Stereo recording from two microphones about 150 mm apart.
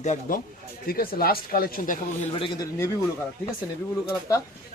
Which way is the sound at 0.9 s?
80° left.